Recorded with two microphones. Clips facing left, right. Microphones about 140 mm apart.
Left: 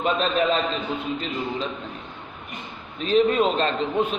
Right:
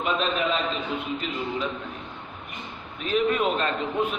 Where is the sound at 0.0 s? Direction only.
35° left (ahead or behind).